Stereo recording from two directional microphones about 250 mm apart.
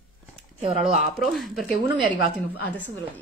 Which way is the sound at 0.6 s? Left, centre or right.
Right.